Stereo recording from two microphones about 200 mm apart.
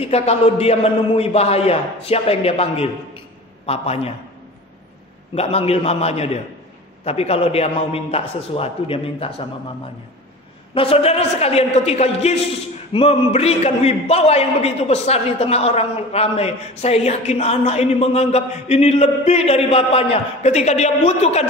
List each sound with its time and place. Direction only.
0.0 s a man's voice: 30° left (ahead or behind)
5.3 s a man's voice: 30° left (ahead or behind)
10.7 s a man's voice: 30° left (ahead or behind)